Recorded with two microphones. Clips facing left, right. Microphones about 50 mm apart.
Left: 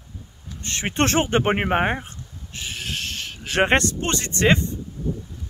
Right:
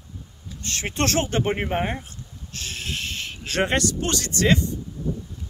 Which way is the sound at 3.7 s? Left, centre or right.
Left.